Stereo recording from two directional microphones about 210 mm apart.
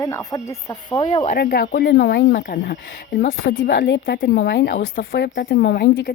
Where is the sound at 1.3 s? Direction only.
50° left (ahead or behind).